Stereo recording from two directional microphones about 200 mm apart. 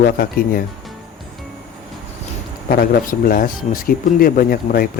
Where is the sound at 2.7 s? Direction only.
45° left (ahead or behind).